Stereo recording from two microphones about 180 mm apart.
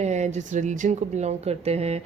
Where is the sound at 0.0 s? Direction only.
40° right (ahead or behind).